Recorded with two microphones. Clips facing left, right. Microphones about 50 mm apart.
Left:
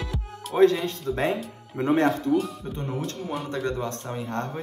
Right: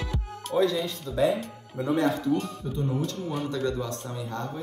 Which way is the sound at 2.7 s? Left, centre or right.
Left.